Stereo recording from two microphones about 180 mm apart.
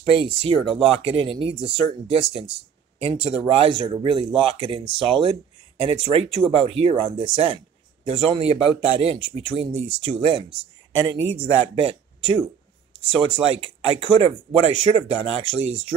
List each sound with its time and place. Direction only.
0.1 s speech: 30° right (ahead or behind)
0.6 s speech: centre (ahead or behind)
1.0 s speech: 30° right (ahead or behind)
11.6 s speech: 35° right (ahead or behind)